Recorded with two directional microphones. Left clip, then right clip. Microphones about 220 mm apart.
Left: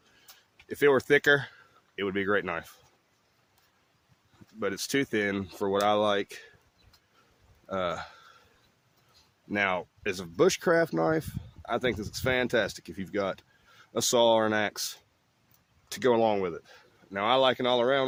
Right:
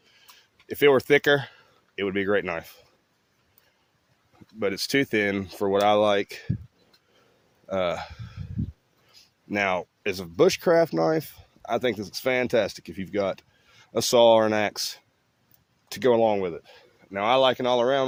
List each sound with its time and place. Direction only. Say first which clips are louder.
0.7 s speech: right 4 dB; 20° right (ahead or behind)
4.6 s speech: right 5 dB; 20° right (ahead or behind)
7.7 s speech: right 5 dB; 20° right (ahead or behind)
9.2 s a sound: right 8 dB; 15° right (ahead or behind)
9.5 s speech: right 3 dB; 20° right (ahead or behind)